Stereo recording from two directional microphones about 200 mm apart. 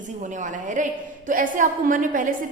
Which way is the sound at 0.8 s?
40° right (ahead or behind).